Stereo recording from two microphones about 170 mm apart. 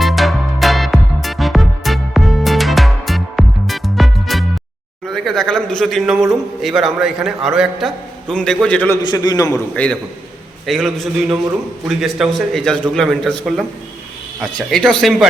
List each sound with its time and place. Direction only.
0.0 s music: centre (ahead or behind)
5.0 s speech: centre (ahead or behind)
9.0 s a man's voice: 25° left (ahead or behind)
9.7 s a man's voice: 5° left (ahead or behind)